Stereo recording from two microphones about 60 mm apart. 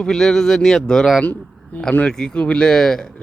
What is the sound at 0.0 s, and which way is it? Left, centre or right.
Speech, centre.